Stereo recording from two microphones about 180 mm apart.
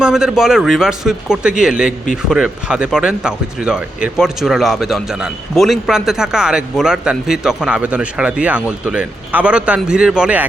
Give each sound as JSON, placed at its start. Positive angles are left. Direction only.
{"t": 0.0, "sound": "speech", "side_deg": -5}